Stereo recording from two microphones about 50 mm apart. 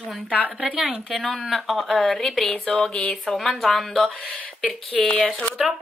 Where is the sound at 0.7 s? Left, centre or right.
Centre.